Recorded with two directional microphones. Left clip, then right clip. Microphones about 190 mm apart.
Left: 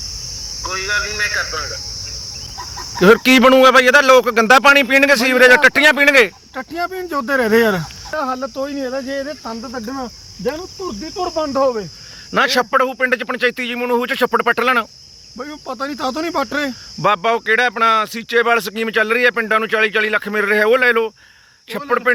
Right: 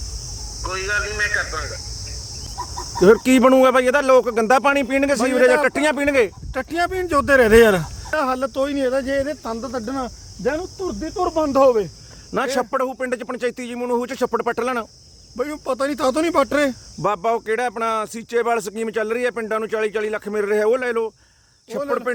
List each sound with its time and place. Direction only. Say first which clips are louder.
0.6 s speech: left 3 dB; 25° left (ahead or behind)
3.0 s speech: left 3 dB; 5° left (ahead or behind)
6.8 s speech: right 3 dB; 15° right (ahead or behind)
9.4 s speech: right 1 dB; 10° right (ahead or behind)
11.2 s speech: even; 25° right (ahead or behind)
11.4 s speech: right 3 dB; 35° right (ahead or behind)
12.3 s speech: left 6 dB; centre (ahead or behind)
15.4 s speech: right 3 dB; 35° right (ahead or behind)
17.0 s speech: left 5 dB; centre (ahead or behind)